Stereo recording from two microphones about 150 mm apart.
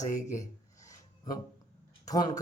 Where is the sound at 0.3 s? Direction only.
25° left (ahead or behind).